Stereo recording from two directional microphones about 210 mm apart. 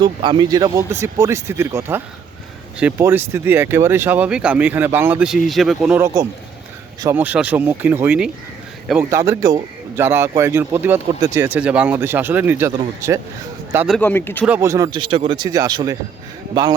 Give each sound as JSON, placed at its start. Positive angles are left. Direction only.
{"t": 0.0, "sound": "a man's voice", "side_deg": -20}
{"t": 13.7, "sound": "speech", "side_deg": 0}
{"t": 14.0, "sound": "speech", "side_deg": 10}
{"t": 14.4, "sound": "a man's voice", "side_deg": -10}